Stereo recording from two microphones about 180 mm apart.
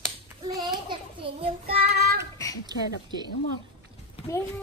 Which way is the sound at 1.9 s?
65° right (ahead or behind).